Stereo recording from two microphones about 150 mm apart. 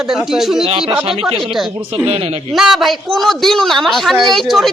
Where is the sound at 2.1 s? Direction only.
40° right (ahead or behind).